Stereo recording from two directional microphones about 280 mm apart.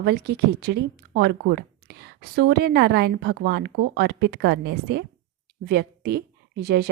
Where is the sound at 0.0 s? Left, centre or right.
Right.